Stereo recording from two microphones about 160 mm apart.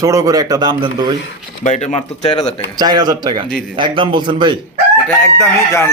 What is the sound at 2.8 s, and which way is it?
A man's voice, 25° right (ahead or behind).